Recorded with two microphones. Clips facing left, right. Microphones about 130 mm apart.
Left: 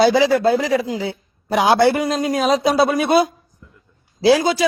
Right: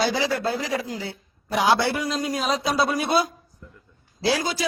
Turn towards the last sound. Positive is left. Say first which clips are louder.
# left 9 dB
turn(degrees=90)